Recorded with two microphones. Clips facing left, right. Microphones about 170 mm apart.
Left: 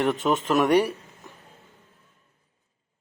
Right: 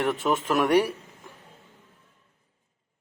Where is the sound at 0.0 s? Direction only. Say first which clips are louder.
Left 2 dB; 5° right (ahead or behind).